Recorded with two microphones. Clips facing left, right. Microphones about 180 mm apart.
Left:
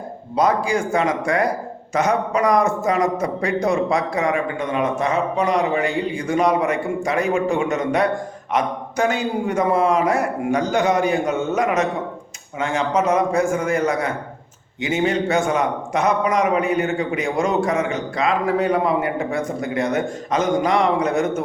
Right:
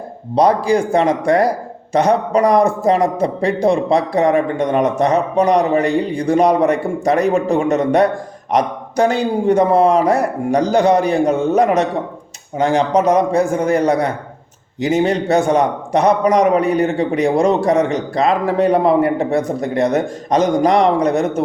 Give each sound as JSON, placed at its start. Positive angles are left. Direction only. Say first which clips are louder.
{"t": 0.3, "sound": "a man's voice", "louder": "right 5 dB", "side_deg": -35}